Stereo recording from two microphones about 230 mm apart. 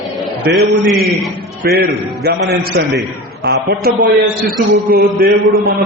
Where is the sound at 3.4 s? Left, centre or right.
Right.